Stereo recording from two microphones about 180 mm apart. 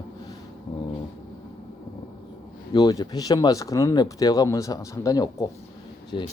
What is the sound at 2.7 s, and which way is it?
Speech, 20° left (ahead or behind).